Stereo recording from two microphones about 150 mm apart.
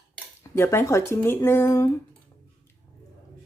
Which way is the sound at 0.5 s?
15° left (ahead or behind).